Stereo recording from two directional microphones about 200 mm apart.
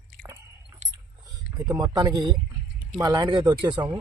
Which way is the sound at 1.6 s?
15° right (ahead or behind).